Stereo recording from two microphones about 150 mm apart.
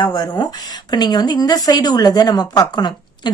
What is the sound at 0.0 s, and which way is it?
A woman's voice, 30° left (ahead or behind).